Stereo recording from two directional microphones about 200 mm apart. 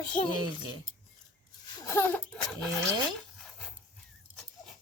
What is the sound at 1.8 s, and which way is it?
Speech, 10° left (ahead or behind).